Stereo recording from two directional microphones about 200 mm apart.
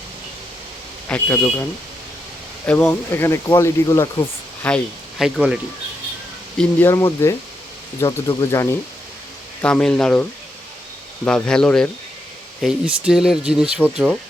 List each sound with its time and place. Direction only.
1.0 s speech: 10° left (ahead or behind)
2.6 s speech: 10° left (ahead or behind)
4.6 s speech: 5° left (ahead or behind)
6.6 s speech: 10° left (ahead or behind)
9.6 s speech: 5° left (ahead or behind)
11.3 s speech: 5° left (ahead or behind)